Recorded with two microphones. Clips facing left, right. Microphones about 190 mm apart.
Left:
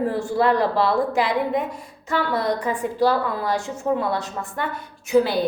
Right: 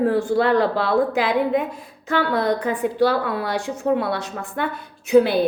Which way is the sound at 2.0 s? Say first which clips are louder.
Right 2 dB; 60° right (ahead or behind).